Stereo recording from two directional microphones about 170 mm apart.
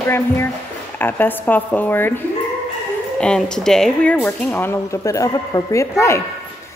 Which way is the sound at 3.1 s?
5° left (ahead or behind).